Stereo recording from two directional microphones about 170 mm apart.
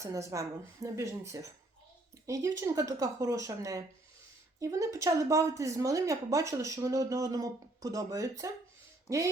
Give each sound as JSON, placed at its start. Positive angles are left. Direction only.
{"t": 0.0, "sound": "a woman's voice", "side_deg": -20}